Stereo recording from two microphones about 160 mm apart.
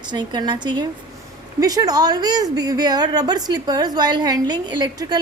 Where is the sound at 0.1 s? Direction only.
30° right (ahead or behind).